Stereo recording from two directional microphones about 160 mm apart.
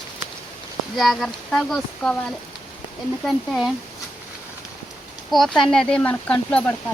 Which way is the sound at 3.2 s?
Centre (ahead or behind).